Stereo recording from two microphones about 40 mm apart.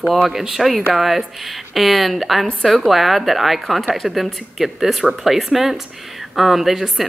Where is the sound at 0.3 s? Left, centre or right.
Centre.